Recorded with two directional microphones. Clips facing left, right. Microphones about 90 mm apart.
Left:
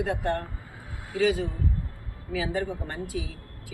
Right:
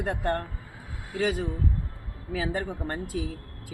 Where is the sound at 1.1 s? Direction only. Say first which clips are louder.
Left 3 dB; 35° right (ahead or behind).